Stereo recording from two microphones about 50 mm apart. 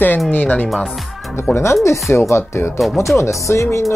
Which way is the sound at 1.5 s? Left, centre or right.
Left.